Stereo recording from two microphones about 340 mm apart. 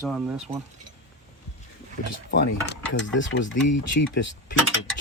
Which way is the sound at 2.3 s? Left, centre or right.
Left.